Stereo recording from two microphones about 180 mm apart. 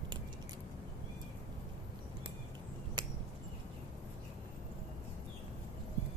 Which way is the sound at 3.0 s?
25° right (ahead or behind).